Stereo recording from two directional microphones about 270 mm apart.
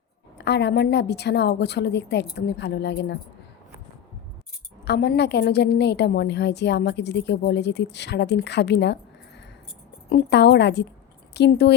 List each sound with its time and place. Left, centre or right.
0.3 s a woman's voice: left
4.9 s a woman's voice: left